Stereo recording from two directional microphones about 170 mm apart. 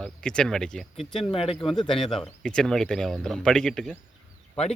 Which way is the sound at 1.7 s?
Centre (ahead or behind).